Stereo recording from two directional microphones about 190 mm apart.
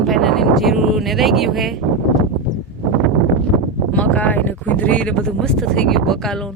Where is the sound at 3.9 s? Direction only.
10° left (ahead or behind).